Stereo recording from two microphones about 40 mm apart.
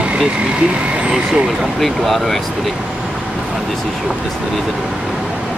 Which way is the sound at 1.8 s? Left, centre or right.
Centre.